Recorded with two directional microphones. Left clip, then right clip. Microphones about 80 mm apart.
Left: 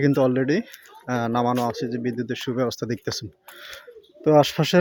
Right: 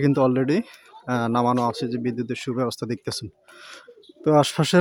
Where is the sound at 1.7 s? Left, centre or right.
Right.